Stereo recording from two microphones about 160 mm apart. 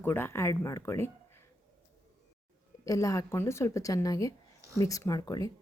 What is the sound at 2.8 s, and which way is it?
A woman's voice, 20° left (ahead or behind).